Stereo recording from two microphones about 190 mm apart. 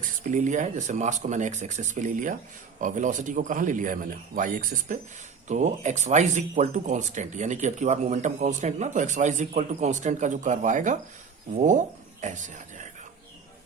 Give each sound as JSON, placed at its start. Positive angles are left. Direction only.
{"t": 0.2, "sound": "a man's voice", "side_deg": -40}